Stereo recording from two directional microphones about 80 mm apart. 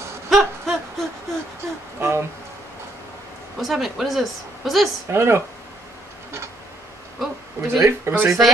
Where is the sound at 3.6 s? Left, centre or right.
Centre.